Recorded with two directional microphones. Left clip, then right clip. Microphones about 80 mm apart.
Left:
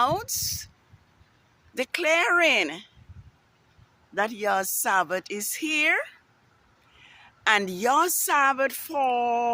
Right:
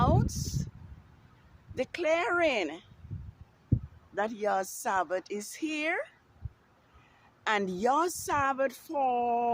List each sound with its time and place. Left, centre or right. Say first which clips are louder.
0.0 s a sound: left 5 dB; left
1.7 s speech: left 5 dB; left
4.1 s a woman's voice: left 5 dB; left